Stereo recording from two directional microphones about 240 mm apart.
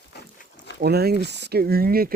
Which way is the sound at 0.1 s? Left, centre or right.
Left.